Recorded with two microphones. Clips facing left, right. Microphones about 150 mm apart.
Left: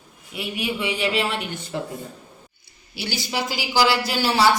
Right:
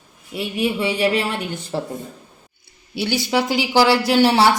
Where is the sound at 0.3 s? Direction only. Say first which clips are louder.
Right 6 dB; 35° right (ahead or behind).